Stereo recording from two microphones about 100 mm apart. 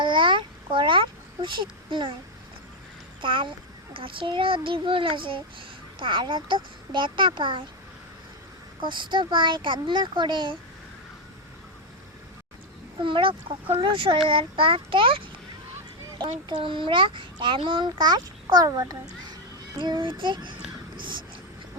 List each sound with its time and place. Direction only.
0.0 s a sound: 55° right (ahead or behind)
1.9 s a child's voice: 55° right (ahead or behind)
3.2 s a child's voice: 55° right (ahead or behind)
8.8 s a child's voice: 55° right (ahead or behind)
13.0 s a child's voice: 55° right (ahead or behind); by 18.9 s 35° right (ahead or behind)
19.8 s a child's voice: 55° right (ahead or behind)
21.0 s a sound: 50° right (ahead or behind)